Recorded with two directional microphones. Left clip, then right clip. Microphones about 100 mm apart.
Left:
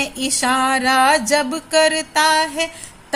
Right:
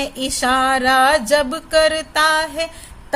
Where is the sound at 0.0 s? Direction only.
30° right (ahead or behind).